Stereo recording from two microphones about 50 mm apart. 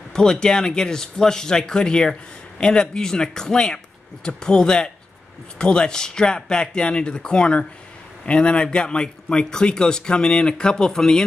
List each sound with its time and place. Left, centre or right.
0.1 s speech: centre